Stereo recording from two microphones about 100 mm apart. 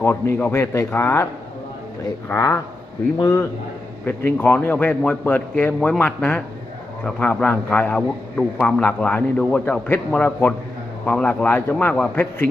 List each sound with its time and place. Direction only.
0.0 s speech: 25° left (ahead or behind)
2.3 s speech: 30° left (ahead or behind)
4.0 s a man's voice: 20° left (ahead or behind)